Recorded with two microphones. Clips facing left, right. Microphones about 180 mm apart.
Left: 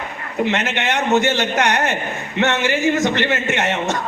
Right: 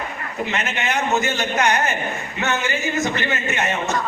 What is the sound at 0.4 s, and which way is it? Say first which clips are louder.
A man's voice: left 4 dB; 80° left.